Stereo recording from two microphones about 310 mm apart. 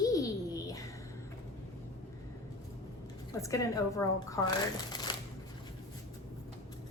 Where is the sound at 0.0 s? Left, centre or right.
Centre.